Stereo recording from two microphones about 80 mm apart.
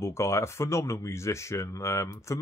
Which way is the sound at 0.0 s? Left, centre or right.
Left.